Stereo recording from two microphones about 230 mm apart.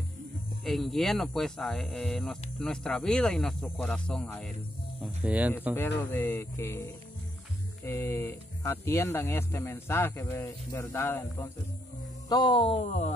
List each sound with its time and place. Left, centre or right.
0.7 s speech: centre
6.1 s speech: centre; by 13.1 s left